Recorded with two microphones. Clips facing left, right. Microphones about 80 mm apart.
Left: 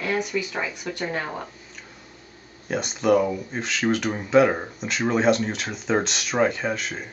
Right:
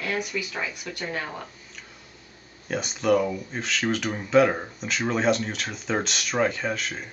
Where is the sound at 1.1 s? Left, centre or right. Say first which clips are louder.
Even; centre.